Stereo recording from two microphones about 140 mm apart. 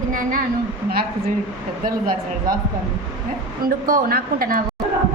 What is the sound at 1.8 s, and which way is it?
Speech, 90° right.